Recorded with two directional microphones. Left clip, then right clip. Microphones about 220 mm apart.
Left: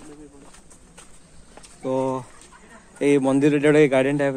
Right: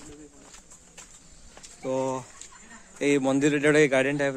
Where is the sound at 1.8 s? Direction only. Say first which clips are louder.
Left 4 dB; centre (ahead or behind).